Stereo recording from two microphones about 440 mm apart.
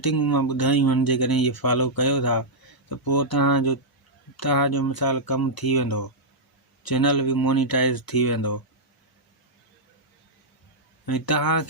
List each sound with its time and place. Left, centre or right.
0.0 s speech: left
11.0 s speech: left